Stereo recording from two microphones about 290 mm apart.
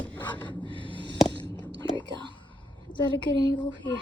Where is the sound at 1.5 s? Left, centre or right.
Centre.